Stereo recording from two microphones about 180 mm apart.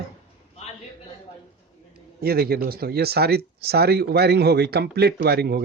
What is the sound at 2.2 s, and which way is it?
Speech, 60° right (ahead or behind).